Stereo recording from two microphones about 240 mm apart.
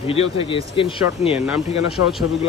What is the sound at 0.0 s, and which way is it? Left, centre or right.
Speech, left.